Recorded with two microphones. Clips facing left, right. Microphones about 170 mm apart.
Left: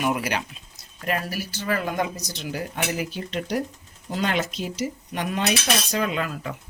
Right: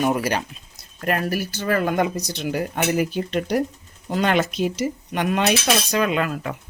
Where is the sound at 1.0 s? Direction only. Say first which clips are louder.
Right 5 dB; 55° right (ahead or behind).